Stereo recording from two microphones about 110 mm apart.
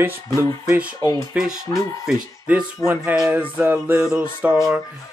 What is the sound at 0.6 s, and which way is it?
Music, 15° right (ahead or behind).